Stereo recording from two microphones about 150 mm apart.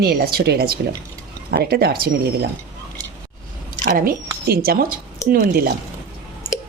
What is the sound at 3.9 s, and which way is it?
Speech, 75° right (ahead or behind).